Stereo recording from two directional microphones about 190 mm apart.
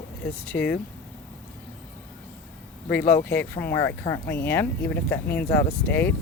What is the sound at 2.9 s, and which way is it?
Speech, 10° left (ahead or behind).